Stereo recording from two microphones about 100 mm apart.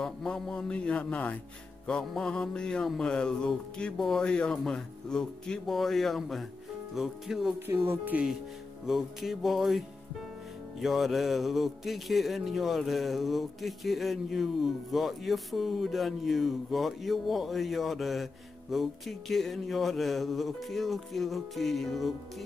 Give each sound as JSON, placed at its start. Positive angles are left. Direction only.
{"t": 0.0, "sound": "speech", "side_deg": 5}
{"t": 7.5, "sound": "speech", "side_deg": -25}
{"t": 8.8, "sound": "speech", "side_deg": -5}